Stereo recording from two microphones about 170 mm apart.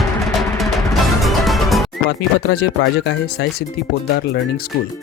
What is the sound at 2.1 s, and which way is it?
Speech, 80° left.